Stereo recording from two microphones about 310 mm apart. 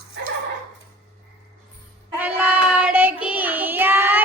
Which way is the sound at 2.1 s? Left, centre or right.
Centre.